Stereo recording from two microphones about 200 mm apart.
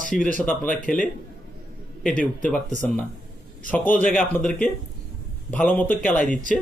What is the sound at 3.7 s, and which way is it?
A man's voice, 10° left (ahead or behind).